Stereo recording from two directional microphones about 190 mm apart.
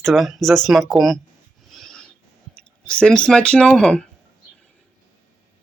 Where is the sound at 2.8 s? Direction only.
5° left (ahead or behind).